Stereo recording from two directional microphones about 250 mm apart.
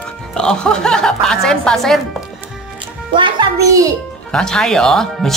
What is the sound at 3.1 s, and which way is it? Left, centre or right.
Speech, centre.